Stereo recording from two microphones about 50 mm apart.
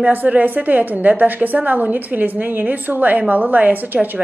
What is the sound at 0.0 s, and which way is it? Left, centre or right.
A woman's voice, right.